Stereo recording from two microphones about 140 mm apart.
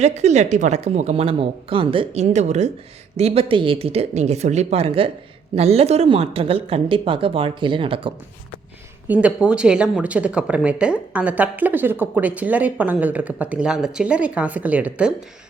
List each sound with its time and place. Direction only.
0.0 s speech: 55° right (ahead or behind)
9.0 s speech: 10° right (ahead or behind)